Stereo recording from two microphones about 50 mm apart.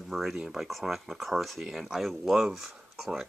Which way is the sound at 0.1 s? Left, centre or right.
Centre.